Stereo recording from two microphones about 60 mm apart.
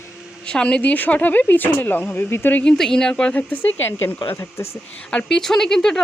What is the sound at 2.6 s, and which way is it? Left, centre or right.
Speech, centre.